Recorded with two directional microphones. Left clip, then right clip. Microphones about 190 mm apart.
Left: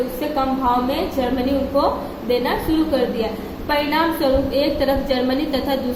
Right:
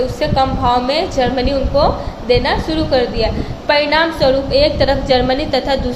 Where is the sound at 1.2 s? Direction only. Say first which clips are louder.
Right 6 dB; 15° right (ahead or behind).